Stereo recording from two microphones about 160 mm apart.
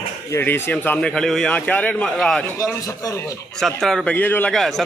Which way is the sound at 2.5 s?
20° left (ahead or behind).